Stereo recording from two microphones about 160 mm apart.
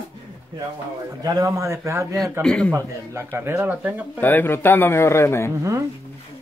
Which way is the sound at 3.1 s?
15° right (ahead or behind).